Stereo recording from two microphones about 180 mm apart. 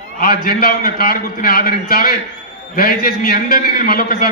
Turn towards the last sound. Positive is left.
turn(degrees=55)  # may be behind; listen again after turning